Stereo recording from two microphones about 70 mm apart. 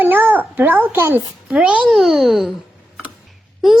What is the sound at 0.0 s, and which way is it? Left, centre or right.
Babbling, right.